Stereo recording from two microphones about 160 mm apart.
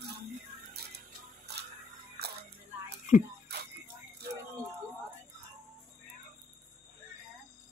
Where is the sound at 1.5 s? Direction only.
90° right.